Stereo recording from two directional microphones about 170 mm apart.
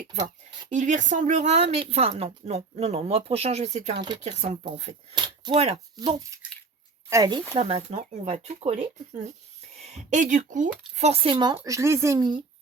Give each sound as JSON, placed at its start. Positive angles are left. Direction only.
{"t": 0.7, "sound": "speech", "side_deg": -45}
{"t": 4.6, "sound": "speech", "side_deg": -30}
{"t": 6.0, "sound": "speech", "side_deg": -20}
{"t": 10.9, "sound": "speech", "side_deg": -35}